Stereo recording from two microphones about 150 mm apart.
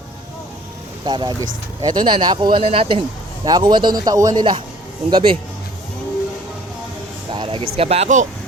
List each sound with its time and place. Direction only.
1.0 s speech: 30° right (ahead or behind)
3.4 s a man's voice: 30° right (ahead or behind)
7.3 s speech: 35° right (ahead or behind)